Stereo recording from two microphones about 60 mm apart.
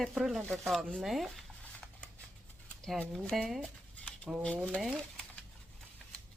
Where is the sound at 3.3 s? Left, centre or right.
Centre.